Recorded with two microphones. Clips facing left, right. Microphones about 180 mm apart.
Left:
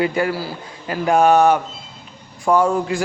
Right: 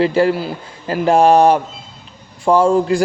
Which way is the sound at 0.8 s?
35° right (ahead or behind).